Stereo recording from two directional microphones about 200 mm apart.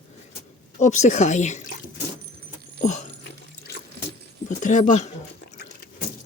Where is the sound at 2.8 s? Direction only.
40° left (ahead or behind).